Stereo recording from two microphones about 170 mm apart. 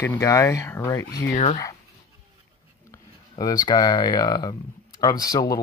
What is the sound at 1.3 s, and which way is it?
Speech, 45° left (ahead or behind).